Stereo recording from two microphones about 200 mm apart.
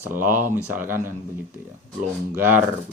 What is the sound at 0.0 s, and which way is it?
A man's voice, 10° right (ahead or behind).